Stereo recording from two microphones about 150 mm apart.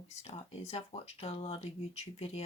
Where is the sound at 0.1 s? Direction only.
45° left (ahead or behind).